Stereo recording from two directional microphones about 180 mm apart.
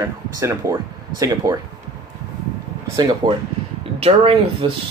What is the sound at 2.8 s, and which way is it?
Speech, 20° right (ahead or behind).